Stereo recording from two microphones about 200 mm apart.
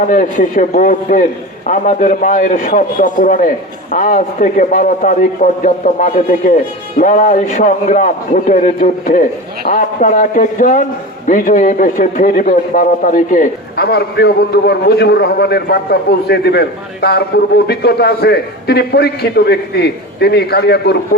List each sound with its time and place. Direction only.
0.1 s a man's voice: 40° left (ahead or behind)